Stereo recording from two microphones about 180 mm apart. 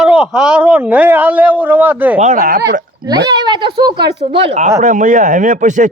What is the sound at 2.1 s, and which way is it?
Speech, 40° right (ahead or behind).